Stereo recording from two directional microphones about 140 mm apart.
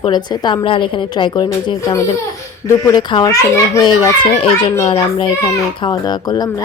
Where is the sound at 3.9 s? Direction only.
40° left (ahead or behind).